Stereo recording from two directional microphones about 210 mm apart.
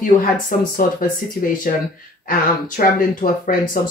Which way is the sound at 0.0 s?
40° left (ahead or behind).